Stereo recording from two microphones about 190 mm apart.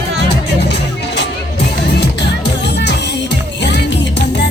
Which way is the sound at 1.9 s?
65° left (ahead or behind).